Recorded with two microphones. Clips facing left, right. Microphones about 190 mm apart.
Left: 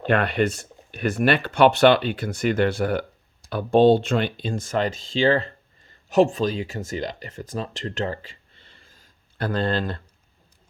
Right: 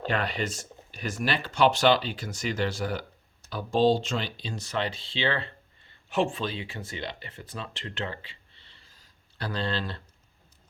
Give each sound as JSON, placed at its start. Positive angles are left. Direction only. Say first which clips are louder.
{"t": 0.0, "sound": "speech", "louder": "left 8 dB", "side_deg": 60}